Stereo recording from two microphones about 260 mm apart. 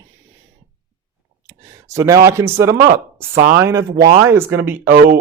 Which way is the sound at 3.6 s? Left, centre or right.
Centre.